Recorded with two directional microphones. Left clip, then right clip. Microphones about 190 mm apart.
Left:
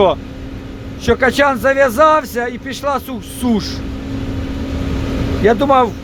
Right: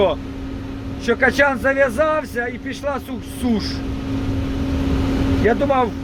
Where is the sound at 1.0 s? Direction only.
20° left (ahead or behind).